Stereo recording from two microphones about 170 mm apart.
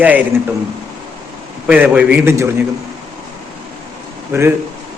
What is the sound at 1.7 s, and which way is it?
Speech, 10° right (ahead or behind).